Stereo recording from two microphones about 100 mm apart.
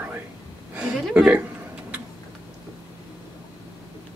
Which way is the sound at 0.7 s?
10° right (ahead or behind).